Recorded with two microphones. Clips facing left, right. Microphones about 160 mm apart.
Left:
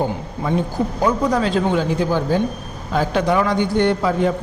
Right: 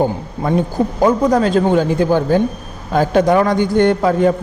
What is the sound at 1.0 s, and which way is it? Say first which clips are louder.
A man's voice: right 5 dB; 45° right (ahead or behind).